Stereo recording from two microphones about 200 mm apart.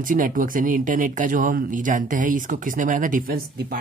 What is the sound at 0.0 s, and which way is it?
Speech, 40° right (ahead or behind).